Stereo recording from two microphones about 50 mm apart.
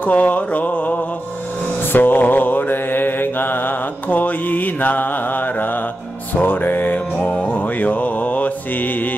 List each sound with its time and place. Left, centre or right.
0.0 s mantra: left
1.9 s mantra: left
6.3 s music: left
7.4 s mantra: left